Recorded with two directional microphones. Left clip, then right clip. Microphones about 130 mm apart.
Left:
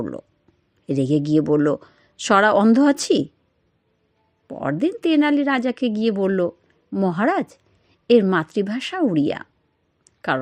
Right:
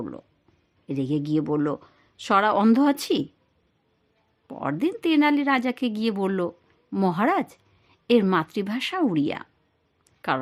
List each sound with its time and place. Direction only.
0.0 s speech: 30° left (ahead or behind)
4.4 s speech: 15° left (ahead or behind)
7.2 s speech: 15° left (ahead or behind)
7.5 s a sound: 15° left (ahead or behind)
8.3 s speech: 15° left (ahead or behind)
10.0 s a sound: 15° left (ahead or behind)